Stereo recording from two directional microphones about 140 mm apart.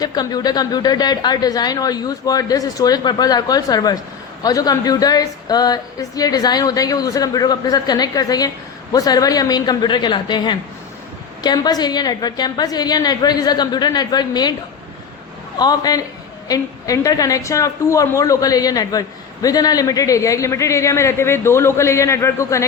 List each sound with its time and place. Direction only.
0.0 s a woman's voice: 30° left (ahead or behind)
15.5 s a woman's voice: 30° left (ahead or behind)